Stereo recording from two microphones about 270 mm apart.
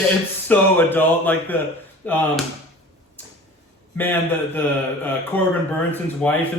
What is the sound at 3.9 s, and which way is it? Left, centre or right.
Speech, centre.